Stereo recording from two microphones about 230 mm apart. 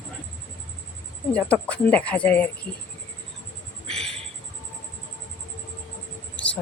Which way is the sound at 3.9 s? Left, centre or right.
Centre.